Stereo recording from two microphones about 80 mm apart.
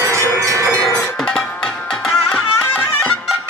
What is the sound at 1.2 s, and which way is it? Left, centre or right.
Music, centre.